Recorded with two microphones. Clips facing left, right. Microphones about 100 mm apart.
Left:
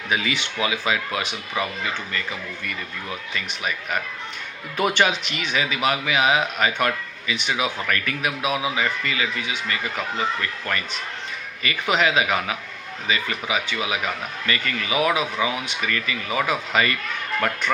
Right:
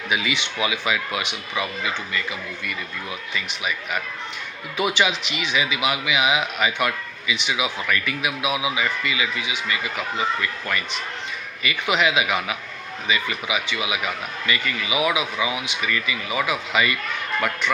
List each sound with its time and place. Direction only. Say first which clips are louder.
0.1 s speech: even; 40° left (ahead or behind)